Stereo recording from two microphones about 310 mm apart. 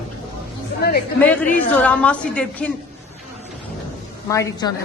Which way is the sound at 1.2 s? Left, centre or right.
Centre.